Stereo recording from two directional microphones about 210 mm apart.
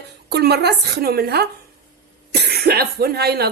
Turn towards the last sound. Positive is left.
turn(degrees=-50)  # may be behind; listen again after turning